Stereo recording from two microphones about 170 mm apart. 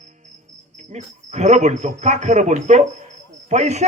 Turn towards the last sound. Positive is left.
turn(degrees=-40)  # may be behind; listen again after turning